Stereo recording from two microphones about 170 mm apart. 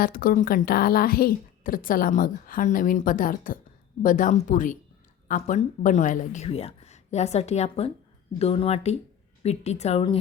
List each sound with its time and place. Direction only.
0.0 s a woman's voice: 55° left (ahead or behind); by 10.2 s 35° left (ahead or behind)